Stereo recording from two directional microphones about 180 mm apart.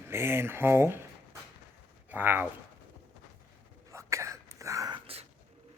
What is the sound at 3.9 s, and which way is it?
Throat clearing, 15° right (ahead or behind).